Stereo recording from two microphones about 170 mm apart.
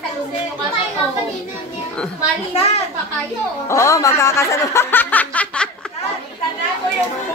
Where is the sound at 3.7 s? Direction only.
15° left (ahead or behind).